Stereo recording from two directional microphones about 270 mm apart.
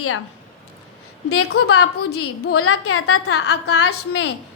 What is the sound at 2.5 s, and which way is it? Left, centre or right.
A woman's voice, left.